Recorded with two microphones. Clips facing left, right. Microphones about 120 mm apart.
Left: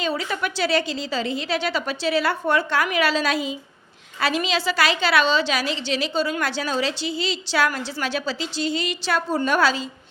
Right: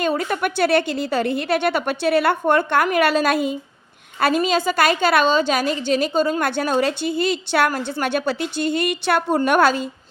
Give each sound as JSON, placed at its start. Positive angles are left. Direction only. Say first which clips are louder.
{"t": 0.0, "sound": "a woman's voice", "louder": "right 4 dB", "side_deg": -50}